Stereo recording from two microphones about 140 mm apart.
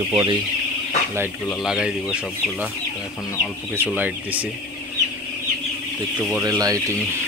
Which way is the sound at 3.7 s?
15° right (ahead or behind).